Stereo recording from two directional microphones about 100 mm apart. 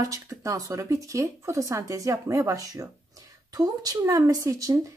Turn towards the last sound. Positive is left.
turn(degrees=-35)  # may be behind; listen again after turning